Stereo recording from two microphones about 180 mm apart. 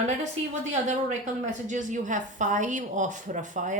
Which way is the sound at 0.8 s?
40° right (ahead or behind).